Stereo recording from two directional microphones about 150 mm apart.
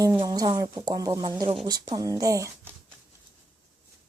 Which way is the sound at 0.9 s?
25° right (ahead or behind).